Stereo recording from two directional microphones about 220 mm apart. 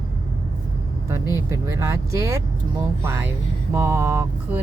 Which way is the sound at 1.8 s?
10° right (ahead or behind).